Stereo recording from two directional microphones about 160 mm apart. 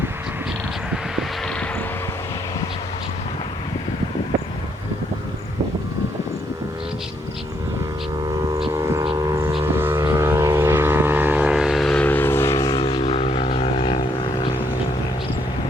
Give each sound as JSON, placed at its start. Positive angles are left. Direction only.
{"t": 8.4, "sound": "vehicle", "side_deg": -35}
{"t": 8.7, "sound": "vehicle", "side_deg": -15}
{"t": 12.8, "sound": "vehicle", "side_deg": 40}